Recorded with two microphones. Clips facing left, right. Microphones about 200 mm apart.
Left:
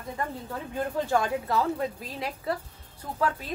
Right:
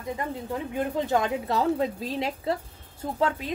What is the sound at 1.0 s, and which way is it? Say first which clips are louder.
A woman's voice: left 1 dB; 20° right (ahead or behind).